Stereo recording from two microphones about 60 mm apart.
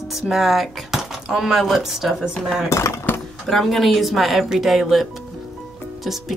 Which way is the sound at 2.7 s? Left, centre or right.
Left.